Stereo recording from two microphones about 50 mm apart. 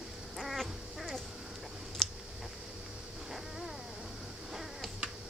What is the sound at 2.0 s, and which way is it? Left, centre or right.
Clicking, centre.